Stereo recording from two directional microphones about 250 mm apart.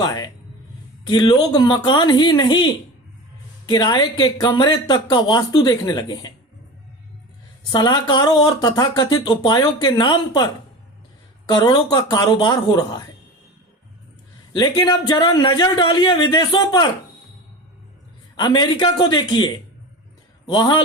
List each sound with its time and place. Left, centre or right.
0.0 s speech: centre
7.7 s speech: centre
14.5 s speech: centre
18.3 s speech: centre
20.5 s a man's voice: centre